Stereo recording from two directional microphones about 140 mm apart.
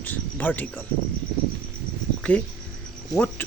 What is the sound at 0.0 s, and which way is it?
Cricket, 10° left (ahead or behind).